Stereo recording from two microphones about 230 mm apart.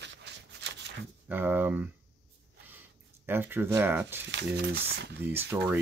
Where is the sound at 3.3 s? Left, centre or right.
Centre.